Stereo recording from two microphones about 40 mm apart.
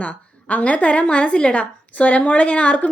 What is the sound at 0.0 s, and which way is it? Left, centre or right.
A woman's voice, left.